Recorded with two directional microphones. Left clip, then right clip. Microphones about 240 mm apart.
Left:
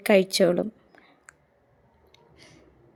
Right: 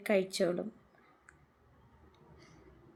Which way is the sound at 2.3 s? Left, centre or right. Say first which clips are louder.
Left 9 dB; left.